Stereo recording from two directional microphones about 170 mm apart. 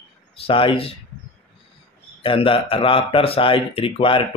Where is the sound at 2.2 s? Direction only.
30° left (ahead or behind).